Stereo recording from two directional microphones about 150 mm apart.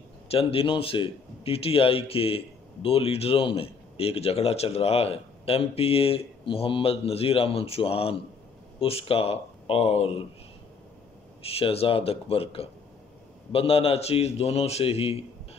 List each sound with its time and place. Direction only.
0.3 s a man's voice: 40° left (ahead or behind)
11.4 s a man's voice: 40° left (ahead or behind)